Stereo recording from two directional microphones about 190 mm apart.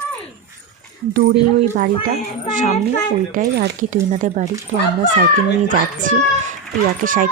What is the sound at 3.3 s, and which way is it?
Speech, 60° right (ahead or behind).